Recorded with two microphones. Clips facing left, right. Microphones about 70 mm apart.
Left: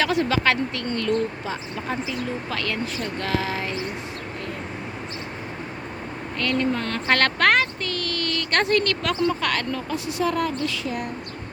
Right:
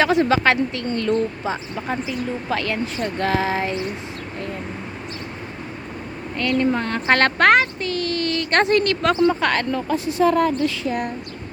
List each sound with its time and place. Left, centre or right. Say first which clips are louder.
0.0 s speech: right 4 dB; right
3.0 s a sound: right 7 dB; right
6.4 s speech: right 4 dB; centre